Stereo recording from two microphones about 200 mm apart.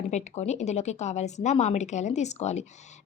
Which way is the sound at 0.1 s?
35° left (ahead or behind).